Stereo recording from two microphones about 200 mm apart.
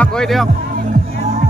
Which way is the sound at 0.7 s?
40° right (ahead or behind).